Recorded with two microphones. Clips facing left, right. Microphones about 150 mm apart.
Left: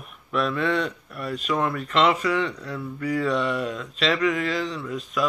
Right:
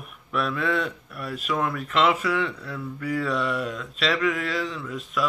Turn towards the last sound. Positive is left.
turn(degrees=0)  # may be behind; listen again after turning